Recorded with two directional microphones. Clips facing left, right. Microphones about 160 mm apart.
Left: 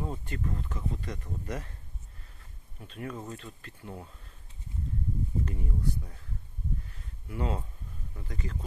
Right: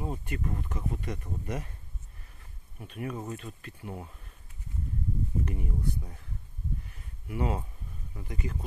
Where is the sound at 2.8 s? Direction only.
15° right (ahead or behind).